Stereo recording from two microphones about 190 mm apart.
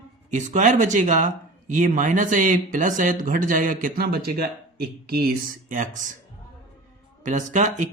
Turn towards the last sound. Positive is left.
turn(degrees=-40)  # may be behind; listen again after turning